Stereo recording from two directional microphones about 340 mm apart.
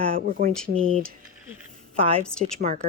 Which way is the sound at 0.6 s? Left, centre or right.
Right.